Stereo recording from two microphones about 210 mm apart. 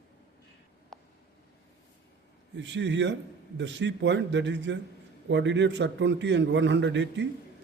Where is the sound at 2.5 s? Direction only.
60° right (ahead or behind).